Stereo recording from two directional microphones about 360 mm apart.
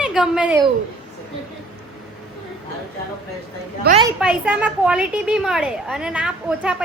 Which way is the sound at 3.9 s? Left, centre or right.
Right.